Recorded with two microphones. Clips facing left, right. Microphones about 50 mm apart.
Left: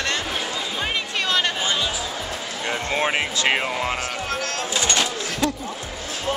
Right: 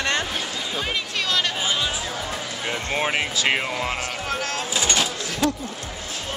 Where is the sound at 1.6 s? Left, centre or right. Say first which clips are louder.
Left 1 dB; centre.